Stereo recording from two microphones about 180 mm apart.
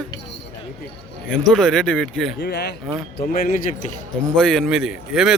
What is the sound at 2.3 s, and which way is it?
Speech, 65° left (ahead or behind).